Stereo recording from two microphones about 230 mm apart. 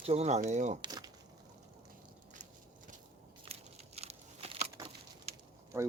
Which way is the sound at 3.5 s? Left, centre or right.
Right.